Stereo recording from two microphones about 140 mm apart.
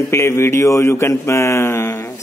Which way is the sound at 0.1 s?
20° left (ahead or behind).